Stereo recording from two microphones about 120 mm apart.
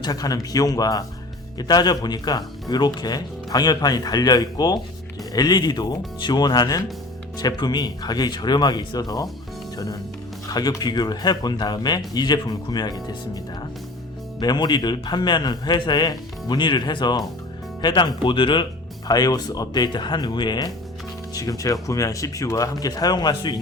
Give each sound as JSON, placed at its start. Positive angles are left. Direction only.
{"t": 0.0, "sound": "speech", "side_deg": 30}
{"t": 10.5, "sound": "speech", "side_deg": 35}